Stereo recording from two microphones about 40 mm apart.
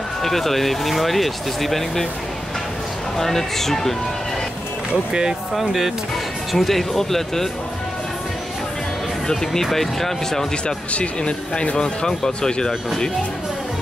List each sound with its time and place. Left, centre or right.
0.2 s speech: centre
3.2 s speech: centre
5.5 s speech: centre
6.5 s speech: centre
9.3 s speech: centre
10.9 s speech: left